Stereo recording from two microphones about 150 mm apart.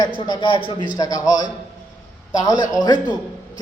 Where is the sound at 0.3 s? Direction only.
35° left (ahead or behind).